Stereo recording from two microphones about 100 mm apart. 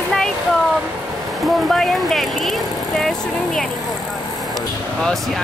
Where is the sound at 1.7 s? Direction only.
5° left (ahead or behind).